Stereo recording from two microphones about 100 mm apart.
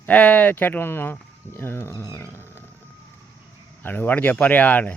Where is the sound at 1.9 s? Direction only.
35° left (ahead or behind).